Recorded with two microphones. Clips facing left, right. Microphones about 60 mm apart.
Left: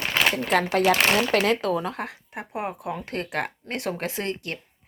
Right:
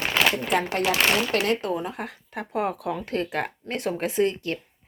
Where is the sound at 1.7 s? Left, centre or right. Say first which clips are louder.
Left 2 dB; left.